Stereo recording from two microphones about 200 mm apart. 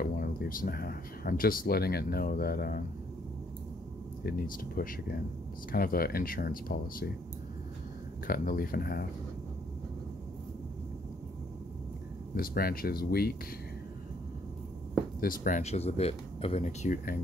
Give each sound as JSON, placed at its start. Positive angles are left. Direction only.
{"t": 0.0, "sound": "speech", "side_deg": 45}
{"t": 4.2, "sound": "speech", "side_deg": 50}
{"t": 8.3, "sound": "speech", "side_deg": 50}
{"t": 12.4, "sound": "speech", "side_deg": 45}
{"t": 15.1, "sound": "speech", "side_deg": 45}